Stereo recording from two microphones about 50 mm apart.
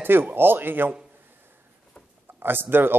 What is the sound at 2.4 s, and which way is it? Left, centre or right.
Speech, right.